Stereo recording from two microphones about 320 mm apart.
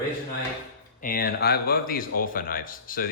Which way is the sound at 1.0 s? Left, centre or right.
Left.